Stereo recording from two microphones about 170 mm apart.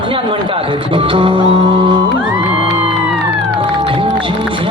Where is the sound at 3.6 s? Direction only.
30° right (ahead or behind).